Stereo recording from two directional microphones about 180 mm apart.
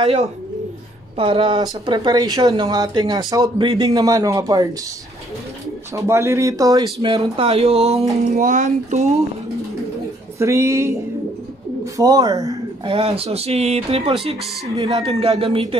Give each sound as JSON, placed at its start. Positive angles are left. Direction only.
{"t": 1.1, "sound": "speech", "side_deg": -30}
{"t": 5.9, "sound": "speech", "side_deg": -15}
{"t": 10.4, "sound": "speech", "side_deg": -15}
{"t": 11.8, "sound": "a sound", "side_deg": -20}
{"t": 12.9, "sound": "speech", "side_deg": -30}
{"t": 15.1, "sound": "speech", "side_deg": -35}